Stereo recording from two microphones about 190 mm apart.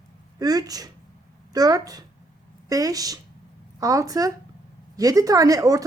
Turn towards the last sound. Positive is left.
turn(degrees=-20)  # may be behind; listen again after turning